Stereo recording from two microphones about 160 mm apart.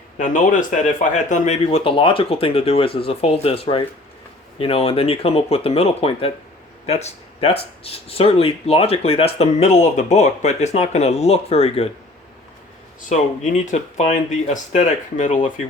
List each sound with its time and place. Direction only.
0.2 s speech: 55° left (ahead or behind)
13.1 s speech: 50° left (ahead or behind)